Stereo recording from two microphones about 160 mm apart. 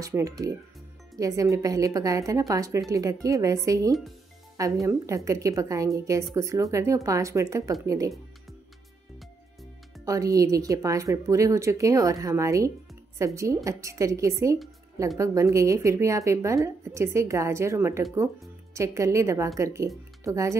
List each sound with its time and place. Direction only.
0.0 s a woman's voice: 20° right (ahead or behind)
10.0 s a woman's voice: 20° right (ahead or behind)